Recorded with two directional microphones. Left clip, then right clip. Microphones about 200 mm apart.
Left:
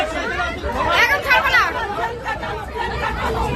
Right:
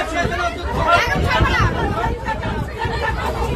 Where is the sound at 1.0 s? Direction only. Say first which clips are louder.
Left 3 dB; 35° left (ahead or behind).